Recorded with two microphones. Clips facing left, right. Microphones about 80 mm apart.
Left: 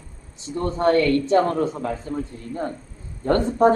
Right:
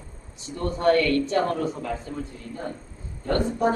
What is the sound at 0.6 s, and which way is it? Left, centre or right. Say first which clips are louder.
Speech: left 2 dB; left.